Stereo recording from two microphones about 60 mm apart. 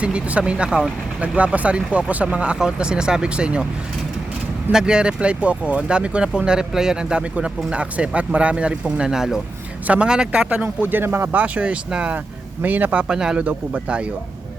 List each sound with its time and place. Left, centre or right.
0.0 s speech: centre
1.4 s speech: right
4.7 s speech: centre
9.8 s speech: right
11.3 s speech: right
12.6 s speech: right
13.1 s speech: centre
13.4 s speech: right